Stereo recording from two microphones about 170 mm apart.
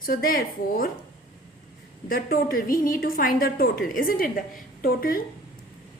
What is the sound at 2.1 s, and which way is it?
A woman's voice, 60° left (ahead or behind).